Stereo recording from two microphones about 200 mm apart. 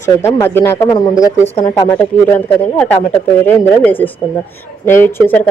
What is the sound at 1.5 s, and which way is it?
Speech, 35° left (ahead or behind).